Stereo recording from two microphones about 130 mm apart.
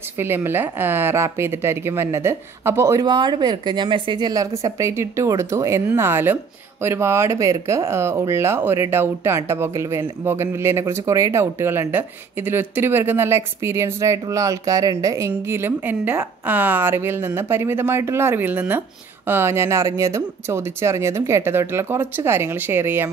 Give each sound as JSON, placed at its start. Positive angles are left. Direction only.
{"t": 0.2, "sound": "a woman's voice", "side_deg": -15}